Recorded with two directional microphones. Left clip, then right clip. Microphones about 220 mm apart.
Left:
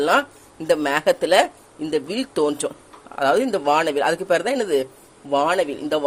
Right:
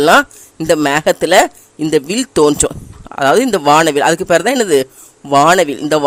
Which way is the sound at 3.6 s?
50° right (ahead or behind).